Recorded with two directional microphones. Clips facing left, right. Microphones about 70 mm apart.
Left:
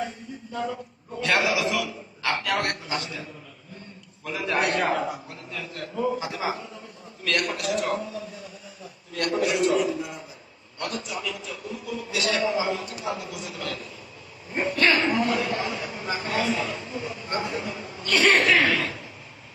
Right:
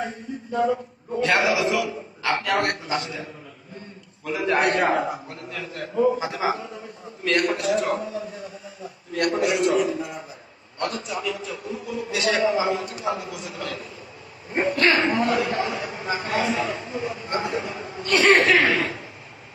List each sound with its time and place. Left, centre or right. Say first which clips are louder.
0.5 s speech: right 8 dB; centre
1.2 s a man's voice: right 3 dB; right
4.3 s a man's voice: right 4 dB; right
5.5 s a man's voice: right 2 dB; centre
7.3 s a man's voice: right 5 dB; right
15.3 s speech: right 3 dB; centre; by 18.8 s right
18.8 s a sound: right 3 dB; centre